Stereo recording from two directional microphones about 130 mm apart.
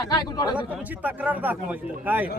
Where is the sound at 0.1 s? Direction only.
30° left (ahead or behind).